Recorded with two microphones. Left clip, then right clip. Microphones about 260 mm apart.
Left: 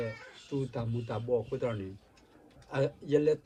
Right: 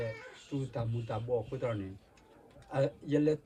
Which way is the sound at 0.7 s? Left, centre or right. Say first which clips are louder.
Left 1 dB; left.